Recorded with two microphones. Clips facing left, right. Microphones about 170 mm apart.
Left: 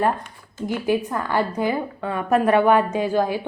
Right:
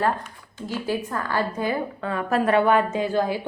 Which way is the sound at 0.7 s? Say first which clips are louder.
Left 4 dB; 15° left (ahead or behind).